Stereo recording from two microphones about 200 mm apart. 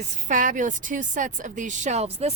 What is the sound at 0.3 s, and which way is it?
Speech, 40° right (ahead or behind).